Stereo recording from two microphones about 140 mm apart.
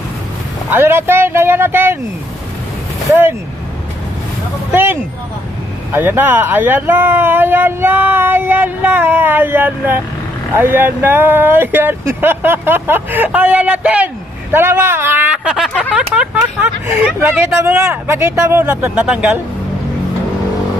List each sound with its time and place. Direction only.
0.7 s speech: 15° right (ahead or behind)
3.1 s speech: 15° right (ahead or behind)
4.7 s speech: 15° right (ahead or behind)
14.5 s a sound: 15° right (ahead or behind); by 16.0 s 5° left (ahead or behind)
16.0 s vehicle: 10° right (ahead or behind)
17.3 s speech: 10° right (ahead or behind)